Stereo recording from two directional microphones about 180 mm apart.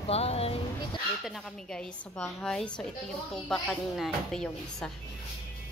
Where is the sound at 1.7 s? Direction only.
5° left (ahead or behind).